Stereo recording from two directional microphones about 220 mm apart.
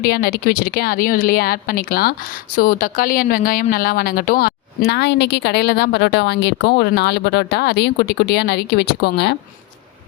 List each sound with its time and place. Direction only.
0.0 s speech: 45° left (ahead or behind)